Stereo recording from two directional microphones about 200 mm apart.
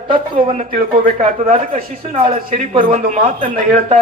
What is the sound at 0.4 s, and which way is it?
A man's voice, 40° right (ahead or behind).